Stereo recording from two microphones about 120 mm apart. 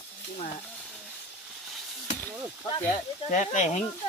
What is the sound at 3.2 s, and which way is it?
Speech, 90° left.